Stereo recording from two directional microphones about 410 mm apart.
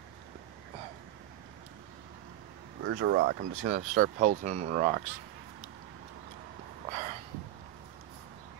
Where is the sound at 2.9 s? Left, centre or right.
Right.